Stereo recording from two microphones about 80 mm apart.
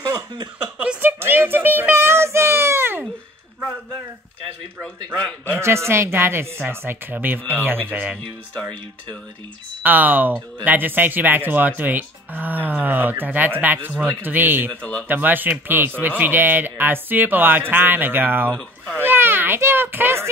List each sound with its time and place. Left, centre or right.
1.0 s a sound: right
5.6 s speech: right
9.8 s speech: right
14.8 s speech: centre
15.0 s speech: right